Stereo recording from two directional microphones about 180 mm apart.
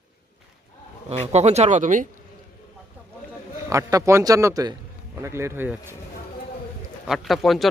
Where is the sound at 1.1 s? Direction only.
35° right (ahead or behind).